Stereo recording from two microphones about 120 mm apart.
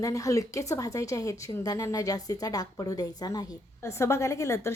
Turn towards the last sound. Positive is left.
turn(degrees=25)  # may be behind; listen again after turning